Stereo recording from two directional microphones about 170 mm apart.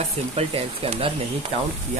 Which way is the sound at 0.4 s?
35° right (ahead or behind).